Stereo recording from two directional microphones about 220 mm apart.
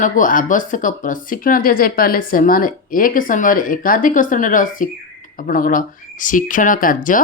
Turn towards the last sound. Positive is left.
turn(degrees=40)  # may be behind; listen again after turning